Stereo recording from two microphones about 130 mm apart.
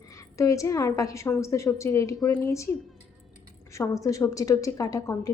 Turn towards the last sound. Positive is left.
turn(degrees=25)  # may be behind; listen again after turning